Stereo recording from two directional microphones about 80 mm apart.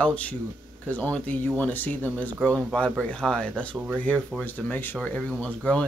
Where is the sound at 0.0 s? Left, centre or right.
Centre.